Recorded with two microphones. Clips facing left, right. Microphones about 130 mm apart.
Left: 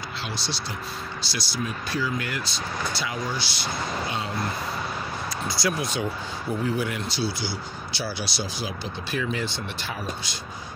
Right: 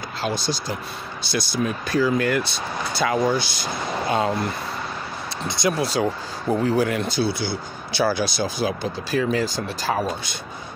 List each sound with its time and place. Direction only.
0.2 s speech: 45° right (ahead or behind)
5.5 s speech: 25° right (ahead or behind); by 7.0 s 40° right (ahead or behind)
7.0 s speech: 55° right (ahead or behind)